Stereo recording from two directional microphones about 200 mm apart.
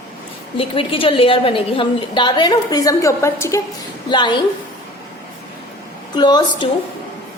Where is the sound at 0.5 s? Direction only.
25° left (ahead or behind).